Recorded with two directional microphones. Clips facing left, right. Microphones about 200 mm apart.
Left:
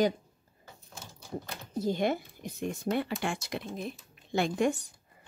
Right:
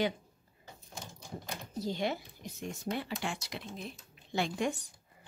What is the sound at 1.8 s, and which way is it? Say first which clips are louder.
Speech: left 6 dB; 50° left (ahead or behind).